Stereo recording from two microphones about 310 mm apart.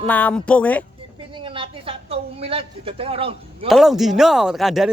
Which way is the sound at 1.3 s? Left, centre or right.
Centre.